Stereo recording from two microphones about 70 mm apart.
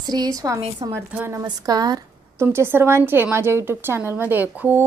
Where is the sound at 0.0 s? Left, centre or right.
Right.